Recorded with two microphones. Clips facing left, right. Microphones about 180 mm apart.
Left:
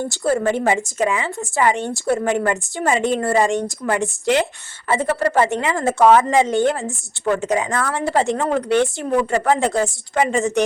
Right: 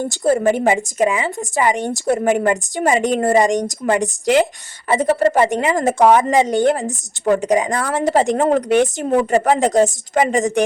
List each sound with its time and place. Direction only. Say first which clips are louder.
0.0 s a woman's voice: right 3 dB; 20° right (ahead or behind)